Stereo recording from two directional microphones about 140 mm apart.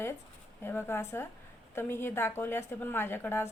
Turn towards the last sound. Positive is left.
turn(degrees=15)  # may be behind; listen again after turning